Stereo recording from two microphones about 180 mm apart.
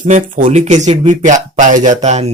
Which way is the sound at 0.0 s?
45° right (ahead or behind).